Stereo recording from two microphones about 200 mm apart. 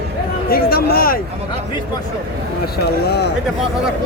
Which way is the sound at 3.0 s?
55° left (ahead or behind).